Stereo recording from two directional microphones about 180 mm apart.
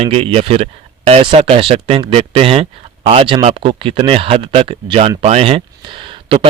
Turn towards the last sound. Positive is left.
turn(degrees=-25)  # may be behind; listen again after turning